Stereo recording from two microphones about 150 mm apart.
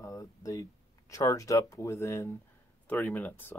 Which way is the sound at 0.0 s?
20° left (ahead or behind).